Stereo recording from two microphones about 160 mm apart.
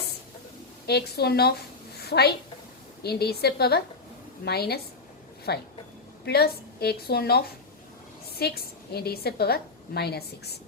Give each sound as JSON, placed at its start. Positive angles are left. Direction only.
{"t": 0.9, "sound": "a woman's voice", "side_deg": 90}
{"t": 6.2, "sound": "a woman's voice", "side_deg": 75}